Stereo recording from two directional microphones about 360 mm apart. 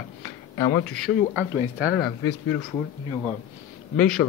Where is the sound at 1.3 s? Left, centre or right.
Centre.